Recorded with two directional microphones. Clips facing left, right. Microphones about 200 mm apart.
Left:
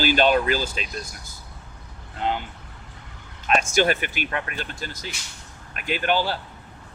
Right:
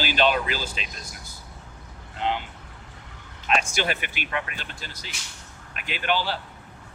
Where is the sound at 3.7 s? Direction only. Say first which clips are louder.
Left 7 dB; 45° left (ahead or behind).